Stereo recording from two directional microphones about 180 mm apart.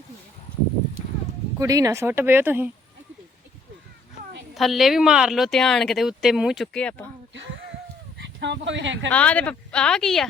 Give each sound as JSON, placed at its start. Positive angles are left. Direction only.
{"t": 1.5, "sound": "speech", "side_deg": -20}
{"t": 4.5, "sound": "speech", "side_deg": 0}
{"t": 8.2, "sound": "speech", "side_deg": -80}
{"t": 9.1, "sound": "speech", "side_deg": 5}